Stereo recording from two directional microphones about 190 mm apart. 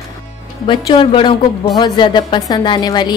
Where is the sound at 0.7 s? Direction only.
25° left (ahead or behind).